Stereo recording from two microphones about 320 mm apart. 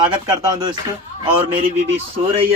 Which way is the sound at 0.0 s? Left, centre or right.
Centre.